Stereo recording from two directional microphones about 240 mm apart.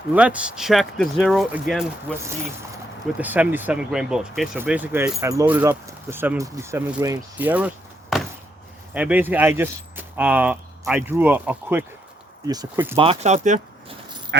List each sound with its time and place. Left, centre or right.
0.1 s speech: centre
2.1 s speech: centre
8.1 s a sound: centre
8.9 s speech: centre
13.0 s speech: right